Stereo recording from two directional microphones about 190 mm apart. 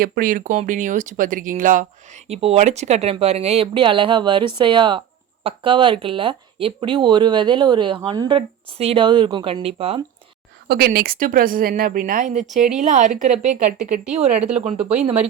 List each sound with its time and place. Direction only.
0.0 s speech: 50° right (ahead or behind); by 10.0 s 30° right (ahead or behind)
10.7 s speech: 55° right (ahead or behind); by 14.9 s 30° right (ahead or behind)